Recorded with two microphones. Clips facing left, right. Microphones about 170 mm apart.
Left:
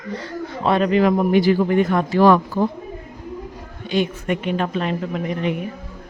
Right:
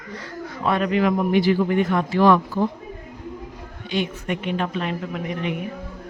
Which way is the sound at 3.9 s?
45° left (ahead or behind).